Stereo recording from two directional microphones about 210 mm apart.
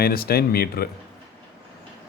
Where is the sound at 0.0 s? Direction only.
45° left (ahead or behind).